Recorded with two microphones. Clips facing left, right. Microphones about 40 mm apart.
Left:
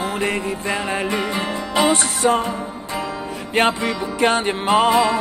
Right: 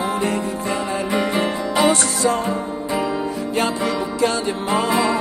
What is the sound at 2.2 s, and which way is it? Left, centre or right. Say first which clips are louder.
Music: left 3 dB; left.